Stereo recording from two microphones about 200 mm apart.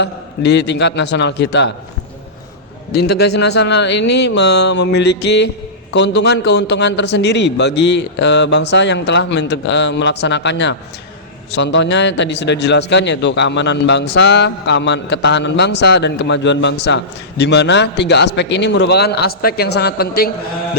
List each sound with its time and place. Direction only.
0.0 s a man's voice: 60° left (ahead or behind)
2.9 s a man's voice: 55° left (ahead or behind)